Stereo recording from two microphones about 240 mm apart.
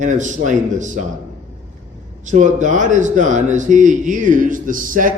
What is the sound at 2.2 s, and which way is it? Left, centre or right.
A man's voice, right.